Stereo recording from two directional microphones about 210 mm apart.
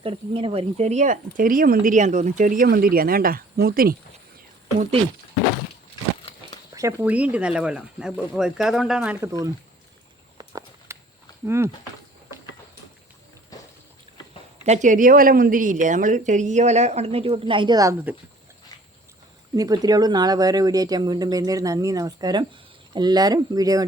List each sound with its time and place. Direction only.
0.0 s speech: 25° right (ahead or behind); by 3.9 s 45° right (ahead or behind)
6.7 s speech: 10° right (ahead or behind)
10.3 s walk: 15° right (ahead or behind)
11.4 s speech: 10° right (ahead or behind)
14.6 s speech: 35° right (ahead or behind); by 18.1 s 15° right (ahead or behind)
19.5 s speech: 15° right (ahead or behind)